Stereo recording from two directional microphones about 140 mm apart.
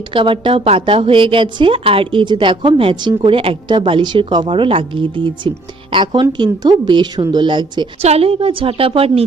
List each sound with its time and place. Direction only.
0.1 s a woman's voice: 35° right (ahead or behind)
8.0 s a woman's voice: 45° right (ahead or behind)